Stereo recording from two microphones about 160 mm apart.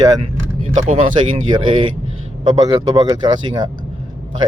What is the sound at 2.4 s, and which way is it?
Speech, 25° right (ahead or behind).